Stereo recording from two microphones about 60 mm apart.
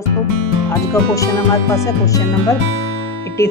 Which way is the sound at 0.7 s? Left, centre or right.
Left.